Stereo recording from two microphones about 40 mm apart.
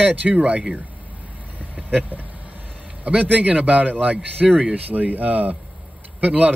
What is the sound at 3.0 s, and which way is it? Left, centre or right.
A man's voice, right.